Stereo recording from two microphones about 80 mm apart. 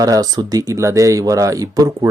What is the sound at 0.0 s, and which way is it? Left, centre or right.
Speech, right.